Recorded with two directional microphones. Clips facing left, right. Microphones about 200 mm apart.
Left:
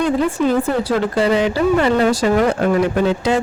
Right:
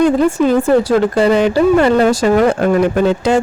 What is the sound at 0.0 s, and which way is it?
Speech, 45° right (ahead or behind).